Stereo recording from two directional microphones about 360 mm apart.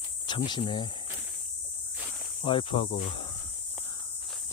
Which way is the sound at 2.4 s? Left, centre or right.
Centre.